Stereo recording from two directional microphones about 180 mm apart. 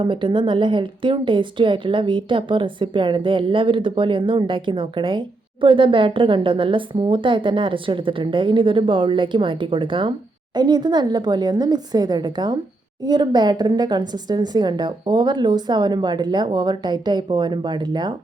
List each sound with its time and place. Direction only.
0.0 s a woman's voice: 25° right (ahead or behind)